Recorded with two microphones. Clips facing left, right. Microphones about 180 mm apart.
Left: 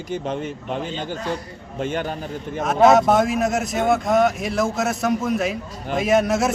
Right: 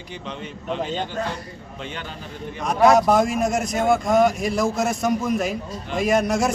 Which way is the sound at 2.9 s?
Centre (ahead or behind).